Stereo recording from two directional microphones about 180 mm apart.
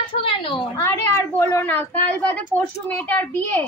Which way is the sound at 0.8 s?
15° left (ahead or behind).